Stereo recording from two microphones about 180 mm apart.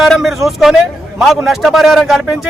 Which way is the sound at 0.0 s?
Centre (ahead or behind).